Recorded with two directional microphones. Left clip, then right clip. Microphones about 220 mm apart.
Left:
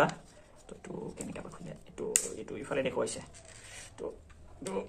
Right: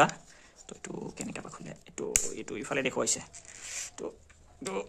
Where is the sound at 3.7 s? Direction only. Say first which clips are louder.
Right 3 dB; 55° right (ahead or behind).